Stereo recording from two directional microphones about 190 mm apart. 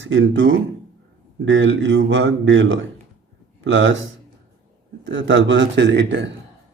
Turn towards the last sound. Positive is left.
turn(degrees=-65)  # may be behind; listen again after turning